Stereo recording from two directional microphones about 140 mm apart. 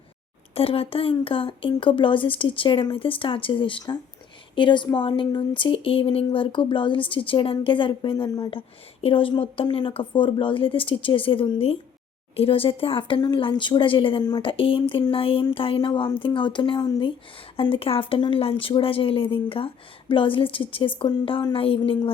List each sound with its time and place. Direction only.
0.5 s a woman's voice: 45° left (ahead or behind)